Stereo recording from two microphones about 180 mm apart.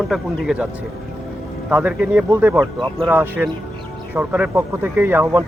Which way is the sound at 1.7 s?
10° right (ahead or behind).